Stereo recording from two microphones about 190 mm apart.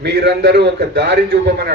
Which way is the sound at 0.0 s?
65° right (ahead or behind).